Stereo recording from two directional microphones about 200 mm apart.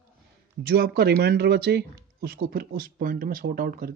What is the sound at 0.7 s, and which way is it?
Speech, 50° right (ahead or behind).